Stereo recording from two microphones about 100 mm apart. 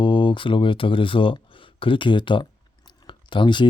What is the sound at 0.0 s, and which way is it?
Speech, 55° left (ahead or behind).